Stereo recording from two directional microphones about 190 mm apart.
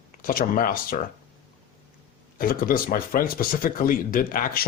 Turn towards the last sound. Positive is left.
turn(degrees=50)  # may be behind; listen again after turning